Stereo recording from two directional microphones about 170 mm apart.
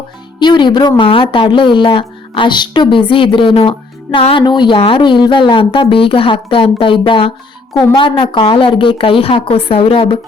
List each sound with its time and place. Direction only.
0.3 s a woman's voice: 25° left (ahead or behind)